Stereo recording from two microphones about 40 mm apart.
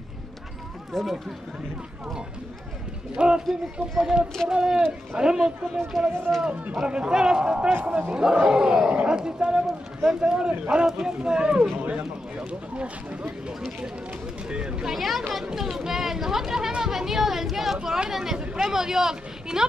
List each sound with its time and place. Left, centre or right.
0.9 s speech: centre
3.2 s a man's voice: right
5.9 s speech: centre
6.7 s a man's voice: right
7.7 s speech: right
8.1 s a man's voice: centre
11.9 s a man's voice: right
14.5 s a man's voice: right
14.9 s speech: centre